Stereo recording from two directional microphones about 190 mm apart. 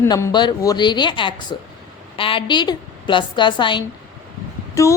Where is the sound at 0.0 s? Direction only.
15° left (ahead or behind).